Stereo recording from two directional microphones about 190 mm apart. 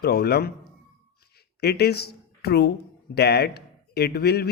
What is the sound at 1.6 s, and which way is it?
Speech, 55° left (ahead or behind).